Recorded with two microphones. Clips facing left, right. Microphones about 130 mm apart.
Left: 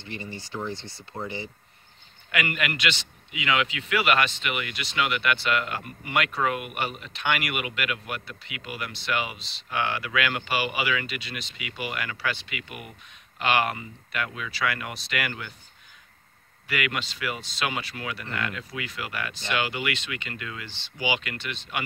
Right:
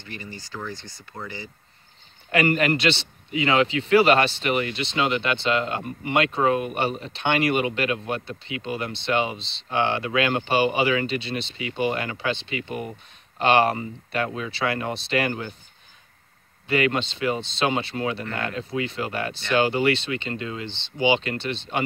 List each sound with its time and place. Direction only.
0.0 s speech: 25° left (ahead or behind)
2.3 s a man's voice: 35° right (ahead or behind)
16.6 s a man's voice: 30° right (ahead or behind)